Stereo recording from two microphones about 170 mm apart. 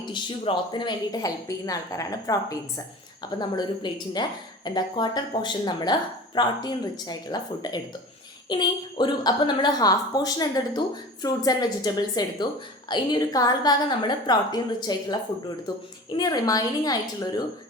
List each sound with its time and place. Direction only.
0.0 s speech: 30° left (ahead or behind)